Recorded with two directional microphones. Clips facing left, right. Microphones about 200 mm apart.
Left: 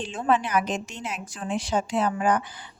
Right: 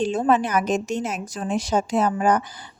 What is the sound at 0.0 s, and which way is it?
A woman's voice, 40° right (ahead or behind).